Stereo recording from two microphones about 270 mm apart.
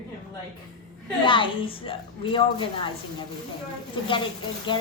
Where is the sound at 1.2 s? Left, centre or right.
Centre.